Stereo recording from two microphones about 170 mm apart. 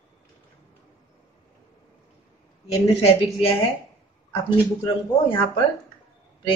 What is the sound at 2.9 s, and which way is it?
Speech, 40° left (ahead or behind).